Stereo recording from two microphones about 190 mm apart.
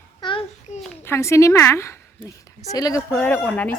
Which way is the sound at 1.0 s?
15° left (ahead or behind).